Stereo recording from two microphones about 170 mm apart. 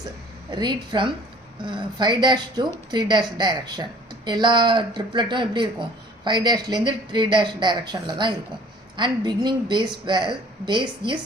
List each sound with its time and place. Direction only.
0.5 s speech: 25° right (ahead or behind)